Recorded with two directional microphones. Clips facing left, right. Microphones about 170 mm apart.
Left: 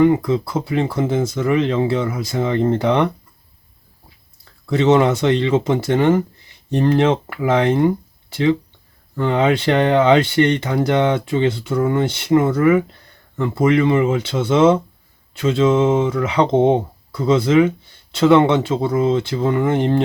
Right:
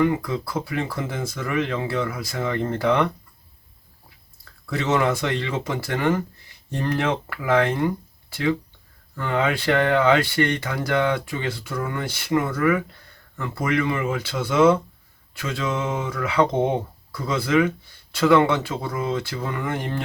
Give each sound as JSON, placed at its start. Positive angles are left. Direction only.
{"t": 0.0, "sound": "speech", "side_deg": 25}
{"t": 4.6, "sound": "speech", "side_deg": 25}